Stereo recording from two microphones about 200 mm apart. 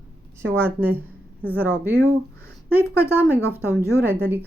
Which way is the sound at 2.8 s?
10° left (ahead or behind).